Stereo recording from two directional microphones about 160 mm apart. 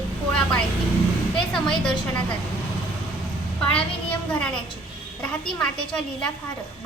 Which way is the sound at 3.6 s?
10° left (ahead or behind).